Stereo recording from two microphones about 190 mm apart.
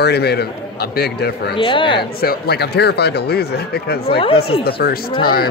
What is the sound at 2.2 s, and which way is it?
A man's voice, 55° left (ahead or behind).